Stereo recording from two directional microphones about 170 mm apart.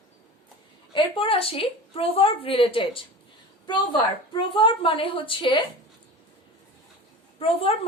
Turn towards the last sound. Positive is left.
turn(degrees=35)  # may be behind; listen again after turning